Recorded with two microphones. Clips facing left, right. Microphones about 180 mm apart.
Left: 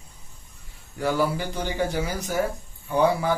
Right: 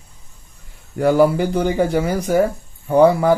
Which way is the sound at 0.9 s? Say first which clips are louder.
Right 10 dB; 55° right (ahead or behind).